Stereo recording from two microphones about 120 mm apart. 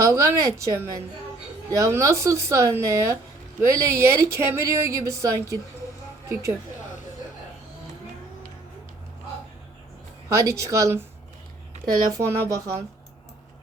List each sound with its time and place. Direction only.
0.0 s a woman's voice: 25° right (ahead or behind)
10.2 s speech: 25° right (ahead or behind)